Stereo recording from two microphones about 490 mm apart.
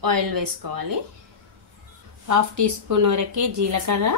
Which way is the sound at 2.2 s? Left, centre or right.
Right.